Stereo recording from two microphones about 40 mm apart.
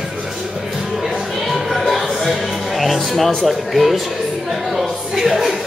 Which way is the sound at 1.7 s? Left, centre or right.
Centre.